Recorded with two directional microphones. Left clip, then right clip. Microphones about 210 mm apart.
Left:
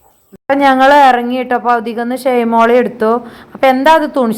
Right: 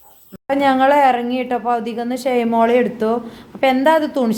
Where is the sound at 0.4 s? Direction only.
15° left (ahead or behind).